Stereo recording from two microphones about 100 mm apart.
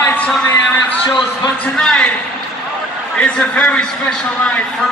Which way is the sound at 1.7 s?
10° left (ahead or behind).